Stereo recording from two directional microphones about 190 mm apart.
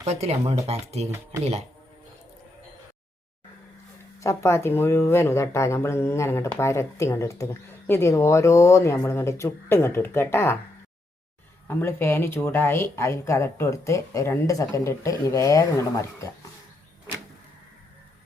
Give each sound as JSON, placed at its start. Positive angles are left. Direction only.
{"t": 0.0, "sound": "speech", "side_deg": -35}
{"t": 4.2, "sound": "speech", "side_deg": 15}
{"t": 11.7, "sound": "speech", "side_deg": 10}